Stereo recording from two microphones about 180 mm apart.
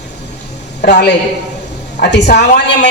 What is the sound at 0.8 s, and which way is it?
A man's voice, 70° left (ahead or behind).